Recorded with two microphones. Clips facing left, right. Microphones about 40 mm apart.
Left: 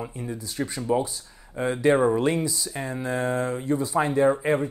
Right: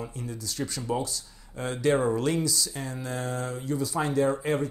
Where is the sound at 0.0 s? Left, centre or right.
Left.